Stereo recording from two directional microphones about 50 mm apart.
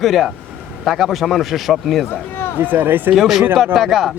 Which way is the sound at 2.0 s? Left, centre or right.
Left.